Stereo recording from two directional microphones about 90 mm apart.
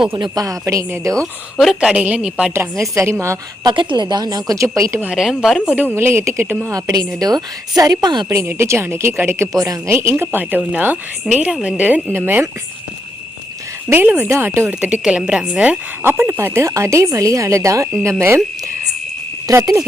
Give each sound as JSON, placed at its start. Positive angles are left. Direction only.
{"t": 0.2, "sound": "a woman's voice", "side_deg": -45}
{"t": 1.5, "sound": "speech", "side_deg": -5}
{"t": 2.9, "sound": "speech", "side_deg": -30}
{"t": 3.6, "sound": "a woman's voice", "side_deg": -60}
{"t": 5.1, "sound": "speech", "side_deg": -5}
{"t": 5.6, "sound": "speech", "side_deg": -20}
{"t": 6.7, "sound": "a woman's voice", "side_deg": -45}
{"t": 8.3, "sound": "speech", "side_deg": -30}
{"t": 9.5, "sound": "a woman's voice", "side_deg": -45}
{"t": 9.9, "sound": "speech", "side_deg": -25}
{"t": 13.9, "sound": "speech", "side_deg": -20}
{"t": 14.8, "sound": "speech", "side_deg": -15}
{"t": 16.0, "sound": "speech", "side_deg": -25}
{"t": 19.5, "sound": "speech", "side_deg": -35}